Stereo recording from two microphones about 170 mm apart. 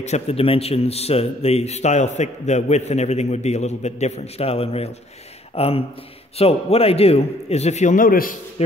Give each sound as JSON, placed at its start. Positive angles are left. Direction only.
{"t": 0.0, "sound": "a man's voice", "side_deg": 40}
{"t": 8.6, "sound": "a man's voice", "side_deg": 40}